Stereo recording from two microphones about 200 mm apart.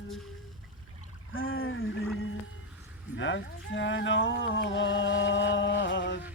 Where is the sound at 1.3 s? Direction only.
85° left.